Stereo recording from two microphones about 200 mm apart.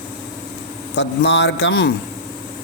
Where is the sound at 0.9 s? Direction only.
60° left (ahead or behind).